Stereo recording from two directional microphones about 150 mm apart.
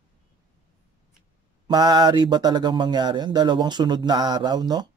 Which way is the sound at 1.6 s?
30° right (ahead or behind).